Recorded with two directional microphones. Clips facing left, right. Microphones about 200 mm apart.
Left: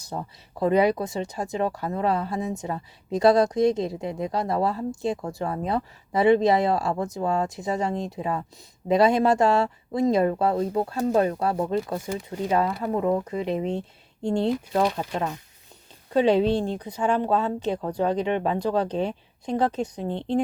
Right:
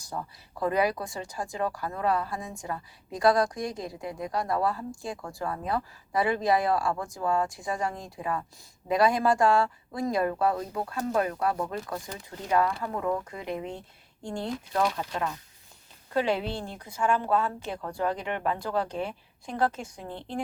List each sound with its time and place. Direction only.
0.0 s speech: 25° left (ahead or behind)